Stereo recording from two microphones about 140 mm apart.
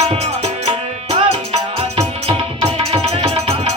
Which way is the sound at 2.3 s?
45° right (ahead or behind).